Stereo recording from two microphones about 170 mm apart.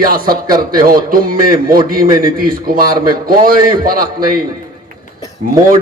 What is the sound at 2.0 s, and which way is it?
Speech, 20° right (ahead or behind).